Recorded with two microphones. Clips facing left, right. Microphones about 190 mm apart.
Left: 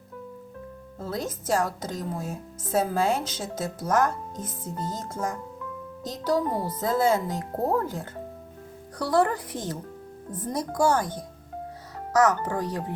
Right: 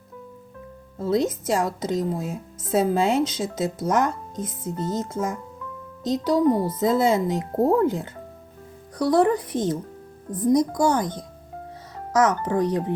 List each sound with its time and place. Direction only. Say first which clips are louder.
1.1 s speech: right 5 dB; 20° right (ahead or behind)